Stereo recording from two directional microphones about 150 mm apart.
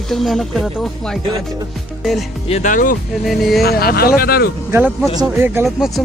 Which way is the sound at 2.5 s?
55° left (ahead or behind).